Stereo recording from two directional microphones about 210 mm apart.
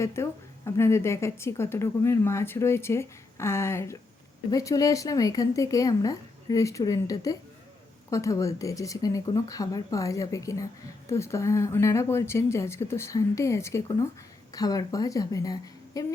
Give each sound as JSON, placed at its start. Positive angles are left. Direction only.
{"t": 0.0, "sound": "a woman's voice", "side_deg": 15}